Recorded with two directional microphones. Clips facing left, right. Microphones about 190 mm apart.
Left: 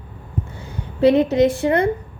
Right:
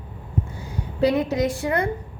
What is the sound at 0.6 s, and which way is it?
Speech, 25° left (ahead or behind).